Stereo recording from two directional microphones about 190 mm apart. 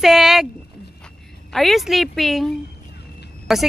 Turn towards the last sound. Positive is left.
turn(degrees=0)  # may be behind; listen again after turning